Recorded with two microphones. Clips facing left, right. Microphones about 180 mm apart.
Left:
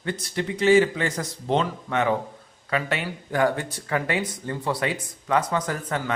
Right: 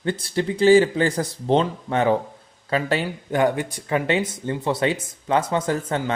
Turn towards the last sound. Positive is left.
turn(degrees=-25)  # may be behind; listen again after turning